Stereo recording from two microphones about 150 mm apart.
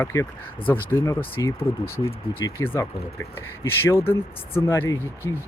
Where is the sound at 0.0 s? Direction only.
20° left (ahead or behind).